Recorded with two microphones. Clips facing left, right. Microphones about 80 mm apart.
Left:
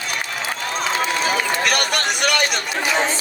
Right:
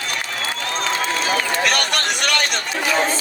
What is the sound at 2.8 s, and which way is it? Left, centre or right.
Chatter, centre.